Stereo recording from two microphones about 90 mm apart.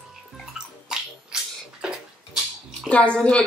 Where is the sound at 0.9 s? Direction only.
5° right (ahead or behind).